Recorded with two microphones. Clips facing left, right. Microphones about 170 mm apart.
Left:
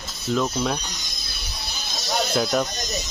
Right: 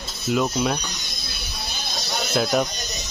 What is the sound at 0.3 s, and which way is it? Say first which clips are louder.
Speech: right 1 dB; 10° right (ahead or behind).